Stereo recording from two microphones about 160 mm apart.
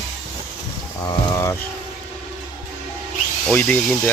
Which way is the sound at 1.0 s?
20° left (ahead or behind).